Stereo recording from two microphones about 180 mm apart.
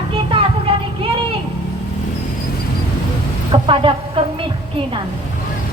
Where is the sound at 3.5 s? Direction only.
30° right (ahead or behind).